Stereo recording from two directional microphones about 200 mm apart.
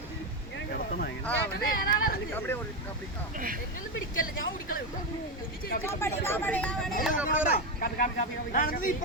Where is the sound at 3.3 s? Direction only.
45° right (ahead or behind).